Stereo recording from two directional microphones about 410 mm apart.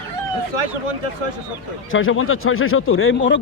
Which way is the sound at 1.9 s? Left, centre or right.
Left.